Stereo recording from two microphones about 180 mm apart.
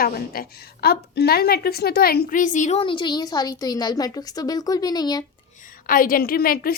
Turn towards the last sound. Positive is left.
turn(degrees=55)  # may be behind; listen again after turning